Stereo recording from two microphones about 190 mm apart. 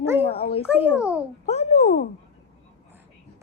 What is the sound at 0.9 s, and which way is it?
Speech, 5° right (ahead or behind).